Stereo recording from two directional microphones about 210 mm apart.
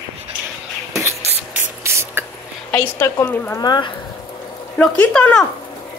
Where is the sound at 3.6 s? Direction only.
20° left (ahead or behind).